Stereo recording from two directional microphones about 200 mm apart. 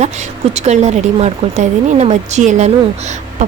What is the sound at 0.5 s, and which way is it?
A woman's voice, 35° right (ahead or behind).